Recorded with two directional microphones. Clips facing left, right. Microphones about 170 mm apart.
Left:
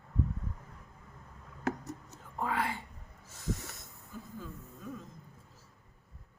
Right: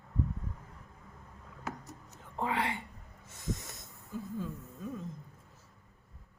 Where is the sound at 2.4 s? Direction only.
25° right (ahead or behind).